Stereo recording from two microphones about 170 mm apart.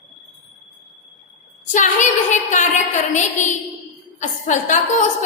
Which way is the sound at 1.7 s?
45° left (ahead or behind).